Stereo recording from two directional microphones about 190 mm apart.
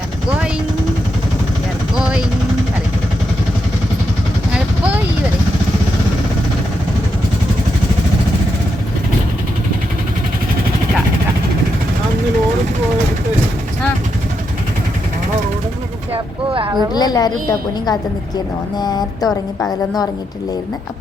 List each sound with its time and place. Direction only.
2.0 s vehicle: 5° right (ahead or behind)
16.1 s vehicle: 25° right (ahead or behind)
16.9 s a sound: 20° left (ahead or behind)
18.8 s speech: 20° left (ahead or behind)
19.5 s a woman's voice: 5° left (ahead or behind)